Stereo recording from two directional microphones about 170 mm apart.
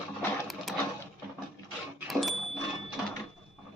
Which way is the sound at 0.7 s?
Centre (ahead or behind).